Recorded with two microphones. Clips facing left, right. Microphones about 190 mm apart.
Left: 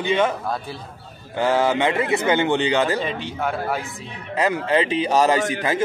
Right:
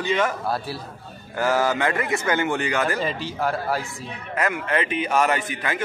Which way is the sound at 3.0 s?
Centre (ahead or behind).